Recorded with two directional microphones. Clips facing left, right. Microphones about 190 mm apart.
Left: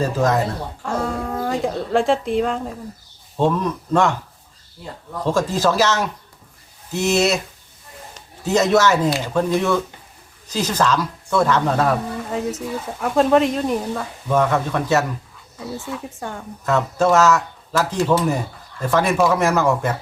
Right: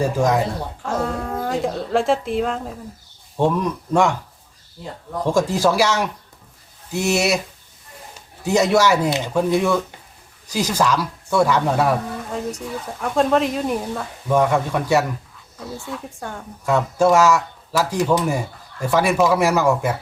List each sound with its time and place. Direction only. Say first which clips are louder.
0.0 s speech: even; 15° right (ahead or behind)
0.9 s a woman's voice: even; centre (ahead or behind)
3.3 s speech: even; 15° right (ahead or behind)
5.2 s speech: right 1 dB; 15° right (ahead or behind)
8.4 s speech: even; 10° right (ahead or behind)
12.3 s speech: left 3 dB; centre (ahead or behind)
14.3 s speech: right 1 dB; 15° right (ahead or behind)
15.5 s speech: left 2 dB; centre (ahead or behind)
16.6 s speech: right 1 dB; 10° right (ahead or behind)